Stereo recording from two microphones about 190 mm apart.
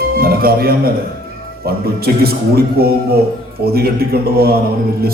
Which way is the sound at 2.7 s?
55° right (ahead or behind).